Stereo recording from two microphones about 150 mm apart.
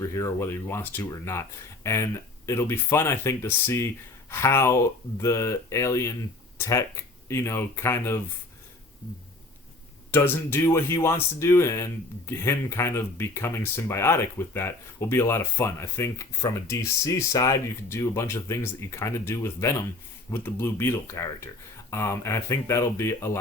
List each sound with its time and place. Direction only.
0.0 s speech: 20° left (ahead or behind)
10.1 s speech: 15° left (ahead or behind)